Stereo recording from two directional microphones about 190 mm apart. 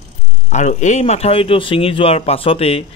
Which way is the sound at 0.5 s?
35° left (ahead or behind).